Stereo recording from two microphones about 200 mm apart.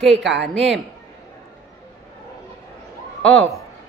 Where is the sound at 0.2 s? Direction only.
65° right (ahead or behind).